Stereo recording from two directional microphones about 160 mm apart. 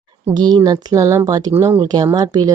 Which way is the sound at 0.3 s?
25° right (ahead or behind).